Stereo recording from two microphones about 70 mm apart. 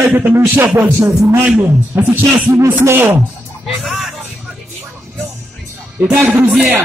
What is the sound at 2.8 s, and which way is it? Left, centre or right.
Speech, right.